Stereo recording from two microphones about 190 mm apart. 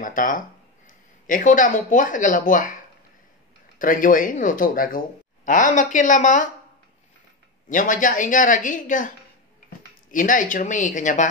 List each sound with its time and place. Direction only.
0.0 s speech: 45° left (ahead or behind)
3.7 s speech: 45° left (ahead or behind)
7.7 s speech: 45° left (ahead or behind)
10.1 s speech: 45° left (ahead or behind)